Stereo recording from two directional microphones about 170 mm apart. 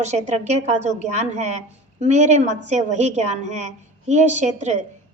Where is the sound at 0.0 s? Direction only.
40° right (ahead or behind).